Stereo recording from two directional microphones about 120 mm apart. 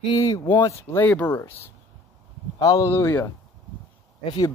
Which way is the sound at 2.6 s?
30° left (ahead or behind).